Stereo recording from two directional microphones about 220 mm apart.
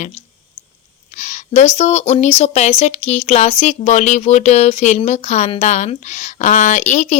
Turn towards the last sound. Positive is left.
turn(degrees=35)  # may be behind; listen again after turning